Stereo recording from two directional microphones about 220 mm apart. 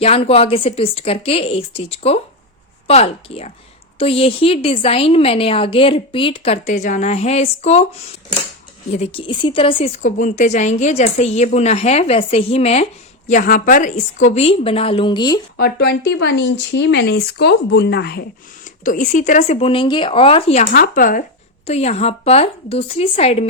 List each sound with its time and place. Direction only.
0.0 s a woman's voice: 25° left (ahead or behind)
8.9 s a woman's voice: 25° left (ahead or behind)
15.5 s a woman's voice: 45° left (ahead or behind); by 20.7 s 30° left (ahead or behind)
20.7 s a woman's voice: 40° left (ahead or behind)